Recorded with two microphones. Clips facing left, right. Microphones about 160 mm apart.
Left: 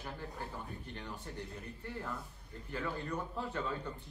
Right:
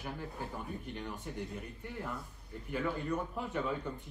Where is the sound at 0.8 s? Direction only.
15° right (ahead or behind).